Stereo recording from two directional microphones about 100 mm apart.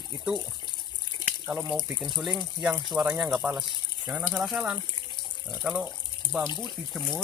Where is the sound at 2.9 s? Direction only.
15° right (ahead or behind).